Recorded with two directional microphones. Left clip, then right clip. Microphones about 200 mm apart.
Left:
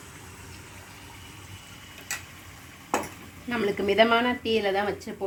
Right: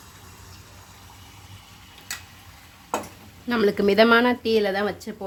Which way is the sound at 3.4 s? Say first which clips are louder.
Right 5 dB; 55° right (ahead or behind).